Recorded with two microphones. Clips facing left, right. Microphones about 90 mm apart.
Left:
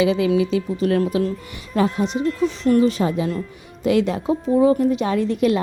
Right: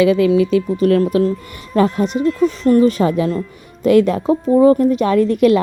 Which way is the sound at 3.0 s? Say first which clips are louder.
Right 5 dB; 60° right (ahead or behind).